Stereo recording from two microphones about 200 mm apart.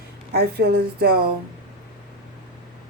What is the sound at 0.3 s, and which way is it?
Speech, 55° right (ahead or behind).